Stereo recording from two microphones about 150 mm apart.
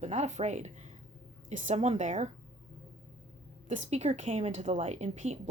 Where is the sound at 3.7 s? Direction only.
50° right (ahead or behind).